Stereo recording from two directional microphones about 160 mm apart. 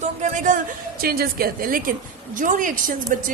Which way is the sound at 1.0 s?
70° right (ahead or behind).